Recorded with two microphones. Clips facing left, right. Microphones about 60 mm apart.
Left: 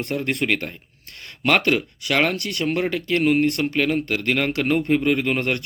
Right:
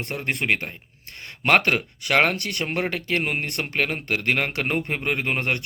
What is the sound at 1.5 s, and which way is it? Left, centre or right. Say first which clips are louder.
Speech: even; right.